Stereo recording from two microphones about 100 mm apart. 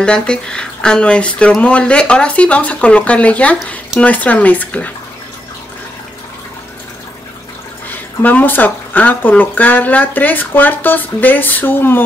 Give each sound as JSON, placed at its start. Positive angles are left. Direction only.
{"t": 0.0, "sound": "speech", "side_deg": 10}
{"t": 8.2, "sound": "speech", "side_deg": 15}